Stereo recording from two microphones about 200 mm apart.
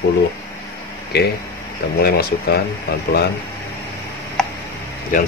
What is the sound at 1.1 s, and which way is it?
Speech, 55° left (ahead or behind).